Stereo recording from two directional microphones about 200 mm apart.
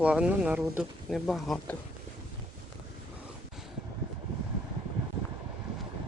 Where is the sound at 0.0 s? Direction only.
5° right (ahead or behind).